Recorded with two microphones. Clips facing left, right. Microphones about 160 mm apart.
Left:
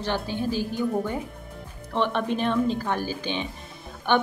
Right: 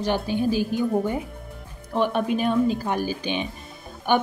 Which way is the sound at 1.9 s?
10° right (ahead or behind).